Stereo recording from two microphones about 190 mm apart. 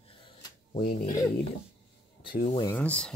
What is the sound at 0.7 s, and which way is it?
Speech, 50° left (ahead or behind).